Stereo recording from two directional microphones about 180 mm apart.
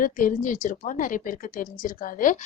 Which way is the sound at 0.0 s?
50° left (ahead or behind).